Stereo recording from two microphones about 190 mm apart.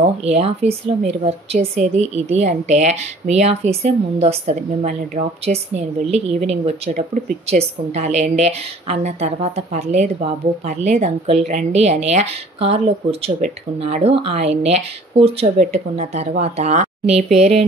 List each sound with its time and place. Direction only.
0.0 s a woman's voice: 35° right (ahead or behind)